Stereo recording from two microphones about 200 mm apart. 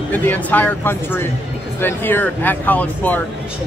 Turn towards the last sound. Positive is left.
turn(degrees=10)  # may be behind; listen again after turning